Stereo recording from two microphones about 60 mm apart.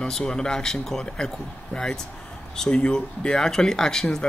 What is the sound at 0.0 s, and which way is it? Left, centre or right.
Speech, centre.